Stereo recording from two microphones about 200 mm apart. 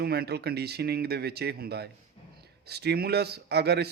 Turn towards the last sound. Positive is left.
turn(degrees=-55)  # may be behind; listen again after turning